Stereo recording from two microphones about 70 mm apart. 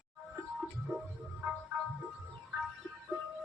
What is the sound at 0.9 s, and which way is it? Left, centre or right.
Music, right.